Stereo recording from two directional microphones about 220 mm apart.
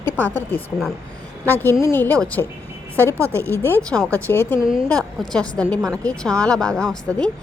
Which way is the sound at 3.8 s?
5° left (ahead or behind).